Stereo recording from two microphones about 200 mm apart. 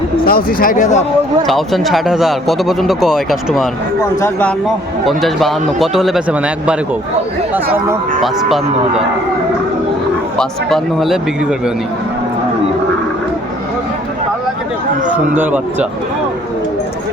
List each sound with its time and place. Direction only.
0.3 s speech: 45° left (ahead or behind)
1.5 s a man's voice: centre (ahead or behind)
8.2 s speech: centre (ahead or behind)
10.3 s speech: centre (ahead or behind)
15.1 s speech: 10° right (ahead or behind)